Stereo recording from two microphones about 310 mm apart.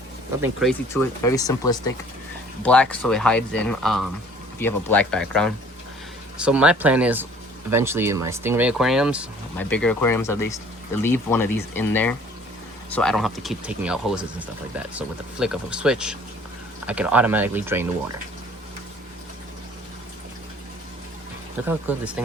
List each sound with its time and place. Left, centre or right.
0.4 s speech: centre
1.2 s speech: centre
21.7 s speech: centre